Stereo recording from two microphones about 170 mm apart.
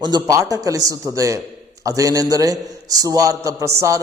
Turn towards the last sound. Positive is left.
turn(degrees=-20)  # may be behind; listen again after turning